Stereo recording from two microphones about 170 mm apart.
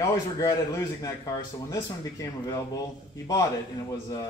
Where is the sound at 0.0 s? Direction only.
20° left (ahead or behind).